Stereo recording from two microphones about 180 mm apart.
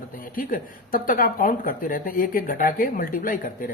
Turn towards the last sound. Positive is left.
turn(degrees=50)  # may be behind; listen again after turning